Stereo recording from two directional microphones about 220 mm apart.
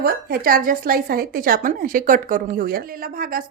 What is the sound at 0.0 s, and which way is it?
A woman's voice, 45° right (ahead or behind).